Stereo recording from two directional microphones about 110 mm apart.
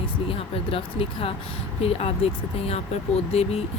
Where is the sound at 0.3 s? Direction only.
55° left (ahead or behind).